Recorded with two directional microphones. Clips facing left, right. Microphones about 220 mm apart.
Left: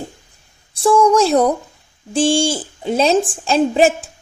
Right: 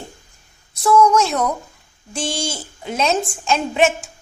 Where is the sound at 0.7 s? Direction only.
30° left (ahead or behind).